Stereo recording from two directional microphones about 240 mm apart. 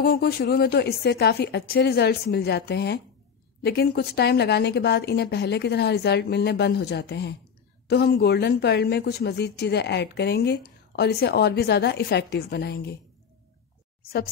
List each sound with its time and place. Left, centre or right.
0.0 s a woman's voice: left